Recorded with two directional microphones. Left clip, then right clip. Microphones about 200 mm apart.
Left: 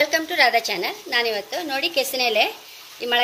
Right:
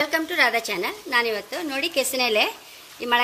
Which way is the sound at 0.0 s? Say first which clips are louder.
Left 3 dB; 55° right (ahead or behind).